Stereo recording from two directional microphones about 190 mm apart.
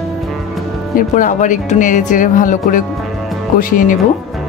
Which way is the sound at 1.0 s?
45° left (ahead or behind).